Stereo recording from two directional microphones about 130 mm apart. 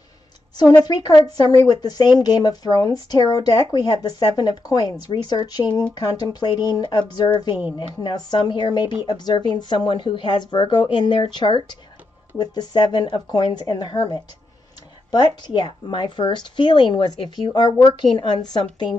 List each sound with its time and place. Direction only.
0.8 s speech: 30° left (ahead or behind)